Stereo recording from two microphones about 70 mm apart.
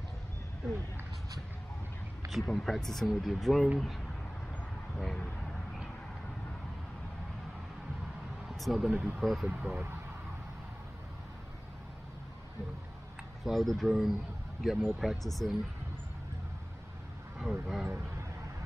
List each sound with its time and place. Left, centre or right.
2.3 s speech: centre
4.9 s a sound: centre
8.5 s speech: centre
8.9 s speech: centre
9.2 s speech: centre
9.5 s speech: right
13.4 s speech: centre
17.4 s speech: centre